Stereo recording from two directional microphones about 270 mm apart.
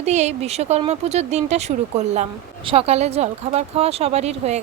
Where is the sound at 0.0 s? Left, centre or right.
Right.